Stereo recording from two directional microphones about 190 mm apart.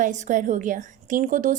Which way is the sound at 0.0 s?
40° right (ahead or behind).